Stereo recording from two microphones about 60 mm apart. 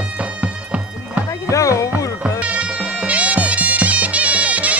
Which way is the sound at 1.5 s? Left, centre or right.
Left.